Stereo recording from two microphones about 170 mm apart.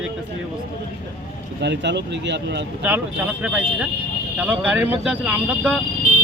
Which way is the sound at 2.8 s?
10° right (ahead or behind).